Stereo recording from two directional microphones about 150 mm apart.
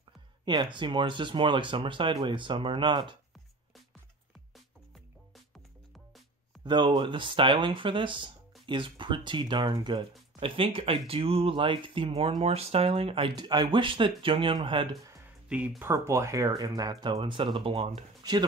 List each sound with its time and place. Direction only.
0.5 s speech: 30° right (ahead or behind)
6.6 s speech: 30° right (ahead or behind)
10.4 s speech: 40° right (ahead or behind)
13.4 s speech: 30° right (ahead or behind)
15.4 s speech: 10° right (ahead or behind)
15.9 s speech: 20° right (ahead or behind); by 18.0 s 40° right (ahead or behind)
18.2 s speech: 25° right (ahead or behind)